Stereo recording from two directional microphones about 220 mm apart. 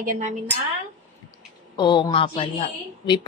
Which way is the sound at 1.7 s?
20° left (ahead or behind).